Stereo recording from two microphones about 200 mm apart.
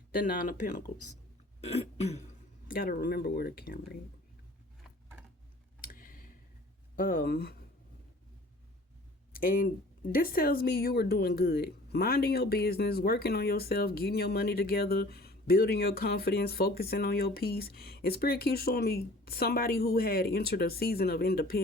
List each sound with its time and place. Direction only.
0.1 s speech: 45° left (ahead or behind)
1.6 s throat clearing: 30° left (ahead or behind)
2.6 s speech: 45° left (ahead or behind)
5.8 s clicking: 45° left (ahead or behind)
6.9 s speech: 45° left (ahead or behind)
9.3 s speech: 45° left (ahead or behind)